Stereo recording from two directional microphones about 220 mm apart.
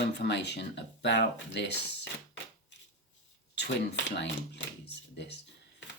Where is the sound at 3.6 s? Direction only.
50° left (ahead or behind).